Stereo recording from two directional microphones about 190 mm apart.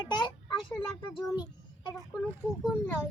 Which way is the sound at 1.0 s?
25° left (ahead or behind).